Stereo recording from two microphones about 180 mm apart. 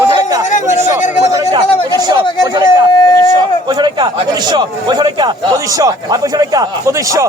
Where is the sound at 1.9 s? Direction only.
20° right (ahead or behind).